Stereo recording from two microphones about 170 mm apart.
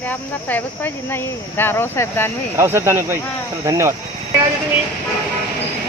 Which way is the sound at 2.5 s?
15° right (ahead or behind).